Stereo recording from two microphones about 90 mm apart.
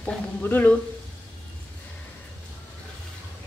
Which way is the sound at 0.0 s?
20° left (ahead or behind).